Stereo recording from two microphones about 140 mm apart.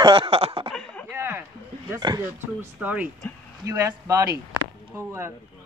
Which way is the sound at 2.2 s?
15° right (ahead or behind).